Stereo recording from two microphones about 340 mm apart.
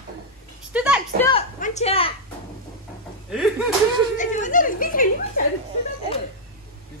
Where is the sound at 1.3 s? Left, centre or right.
Centre.